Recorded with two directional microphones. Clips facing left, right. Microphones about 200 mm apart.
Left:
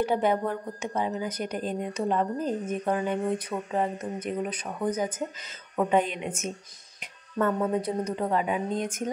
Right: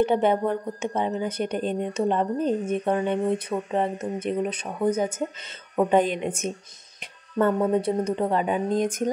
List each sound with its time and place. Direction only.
0.0 s a woman's voice: 25° right (ahead or behind)